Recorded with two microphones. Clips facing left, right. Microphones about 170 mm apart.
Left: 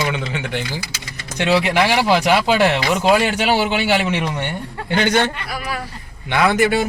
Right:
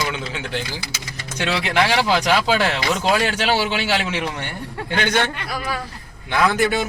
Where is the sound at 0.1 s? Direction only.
60° left (ahead or behind).